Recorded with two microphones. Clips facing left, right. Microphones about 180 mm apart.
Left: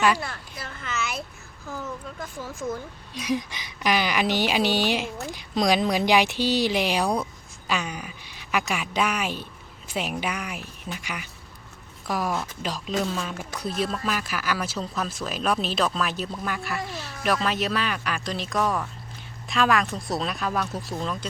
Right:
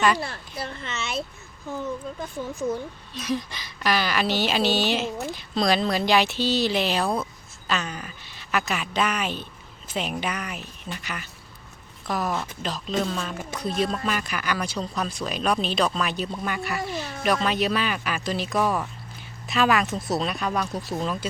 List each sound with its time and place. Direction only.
0.2 s speech: 30° right (ahead or behind)
3.2 s speech: 15° left (ahead or behind); by 21.2 s 5° right (ahead or behind)